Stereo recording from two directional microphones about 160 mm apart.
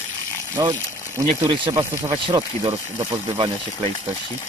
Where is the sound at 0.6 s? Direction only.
25° right (ahead or behind).